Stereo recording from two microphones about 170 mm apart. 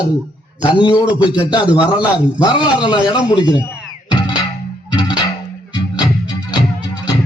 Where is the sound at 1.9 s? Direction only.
25° left (ahead or behind).